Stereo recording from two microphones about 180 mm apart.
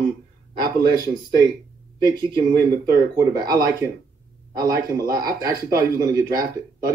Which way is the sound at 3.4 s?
20° right (ahead or behind).